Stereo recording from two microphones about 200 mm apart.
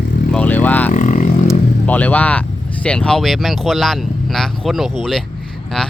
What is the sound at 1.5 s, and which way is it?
Vehicle, 5° left (ahead or behind).